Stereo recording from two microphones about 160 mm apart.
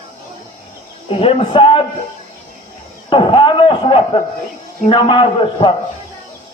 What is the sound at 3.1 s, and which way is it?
A man's voice, 30° left (ahead or behind).